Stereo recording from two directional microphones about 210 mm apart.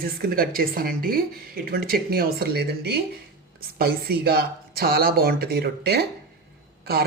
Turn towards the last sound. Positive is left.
turn(degrees=-50)  # may be behind; listen again after turning